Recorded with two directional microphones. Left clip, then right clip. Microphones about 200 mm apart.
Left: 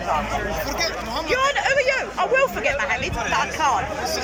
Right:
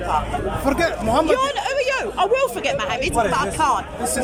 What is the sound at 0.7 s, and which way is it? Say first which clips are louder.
Speech: right 6 dB; 60° right (ahead or behind).